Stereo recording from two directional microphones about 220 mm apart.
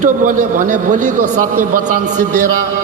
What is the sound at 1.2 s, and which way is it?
Speech, 85° right.